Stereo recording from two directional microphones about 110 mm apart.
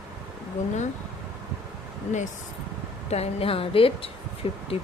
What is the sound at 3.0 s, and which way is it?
Speech, 70° left (ahead or behind).